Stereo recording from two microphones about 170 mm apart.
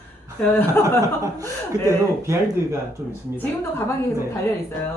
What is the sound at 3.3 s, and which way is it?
Speech, 15° left (ahead or behind).